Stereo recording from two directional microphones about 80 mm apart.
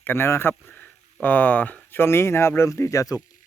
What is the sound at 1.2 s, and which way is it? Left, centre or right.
Speech, centre.